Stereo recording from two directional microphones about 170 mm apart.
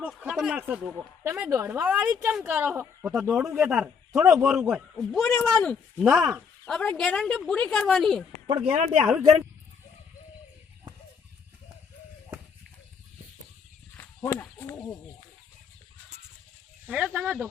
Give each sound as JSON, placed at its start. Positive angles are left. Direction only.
{"t": 0.3, "sound": "a woman's voice", "side_deg": -5}
{"t": 8.4, "sound": "speech", "side_deg": -35}
{"t": 13.9, "sound": "a sound", "side_deg": 15}
{"t": 16.9, "sound": "speech", "side_deg": -5}